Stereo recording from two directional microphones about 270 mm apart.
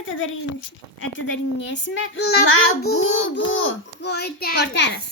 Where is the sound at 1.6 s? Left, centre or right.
Left.